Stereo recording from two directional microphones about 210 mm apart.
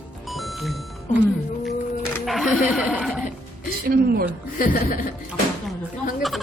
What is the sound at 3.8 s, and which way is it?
Speech, 45° right (ahead or behind).